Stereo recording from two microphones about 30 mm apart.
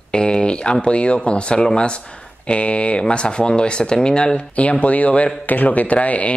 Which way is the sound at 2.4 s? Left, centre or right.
Left.